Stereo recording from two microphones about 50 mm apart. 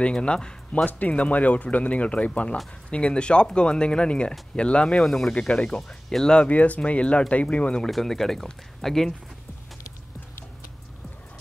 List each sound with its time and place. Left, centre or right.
0.0 s speech: left
0.8 s speech: left; by 5.3 s centre
5.3 s speech: left
5.8 s speech: centre
6.3 s speech: left
7.8 s speech: centre